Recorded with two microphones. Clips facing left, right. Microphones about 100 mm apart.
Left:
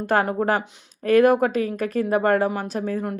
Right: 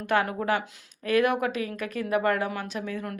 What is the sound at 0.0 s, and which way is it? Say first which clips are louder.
Speech: left 5 dB; 35° left (ahead or behind).